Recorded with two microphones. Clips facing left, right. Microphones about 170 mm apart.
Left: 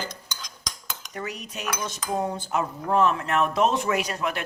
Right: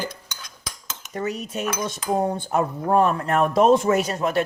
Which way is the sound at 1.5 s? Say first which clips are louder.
Right 5 dB; 45° right (ahead or behind).